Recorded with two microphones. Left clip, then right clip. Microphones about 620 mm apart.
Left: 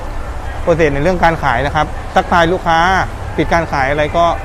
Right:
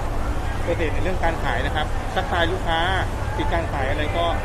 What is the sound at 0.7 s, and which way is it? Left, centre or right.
A man's voice, left.